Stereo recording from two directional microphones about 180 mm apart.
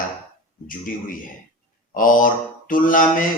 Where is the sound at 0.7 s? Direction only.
50° left (ahead or behind).